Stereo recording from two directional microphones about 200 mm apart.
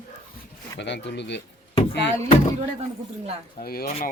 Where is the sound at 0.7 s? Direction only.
60° left (ahead or behind).